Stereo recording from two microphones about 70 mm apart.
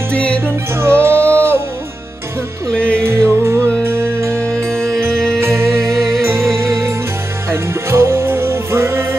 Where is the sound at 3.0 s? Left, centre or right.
Right.